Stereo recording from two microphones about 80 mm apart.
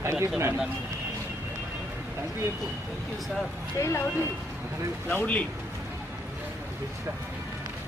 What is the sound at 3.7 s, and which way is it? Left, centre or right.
Speech, left.